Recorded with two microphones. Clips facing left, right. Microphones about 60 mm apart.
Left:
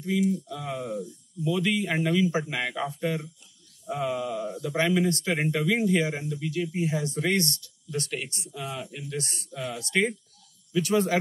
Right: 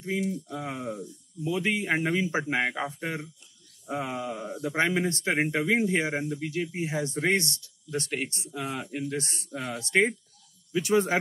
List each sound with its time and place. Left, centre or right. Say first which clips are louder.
0.5 s speech: left 1 dB; right
8.5 s speech: right 3 dB; right